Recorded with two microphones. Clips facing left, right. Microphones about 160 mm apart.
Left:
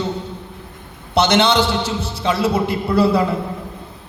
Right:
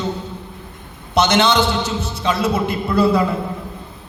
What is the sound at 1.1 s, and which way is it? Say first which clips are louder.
A man's voice: even; 30° left (ahead or behind).